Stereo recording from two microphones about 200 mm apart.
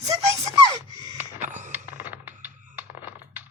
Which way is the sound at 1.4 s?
40° right (ahead or behind).